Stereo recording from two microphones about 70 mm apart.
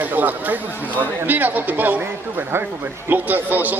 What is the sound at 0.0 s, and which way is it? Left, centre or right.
Speech, right.